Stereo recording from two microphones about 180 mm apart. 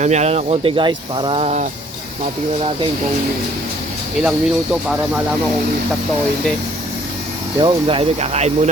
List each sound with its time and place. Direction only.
0.0 s speech: 40° right (ahead or behind)
4.2 s speech: 5° right (ahead or behind)
7.6 s speech: 30° right (ahead or behind)